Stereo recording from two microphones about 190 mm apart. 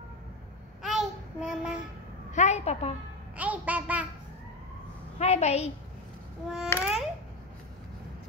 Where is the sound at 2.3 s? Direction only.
35° left (ahead or behind).